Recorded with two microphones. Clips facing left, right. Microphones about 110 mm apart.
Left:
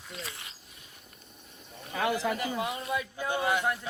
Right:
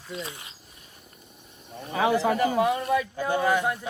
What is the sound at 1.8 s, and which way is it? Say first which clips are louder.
Speech: right 6 dB; 60° right (ahead or behind).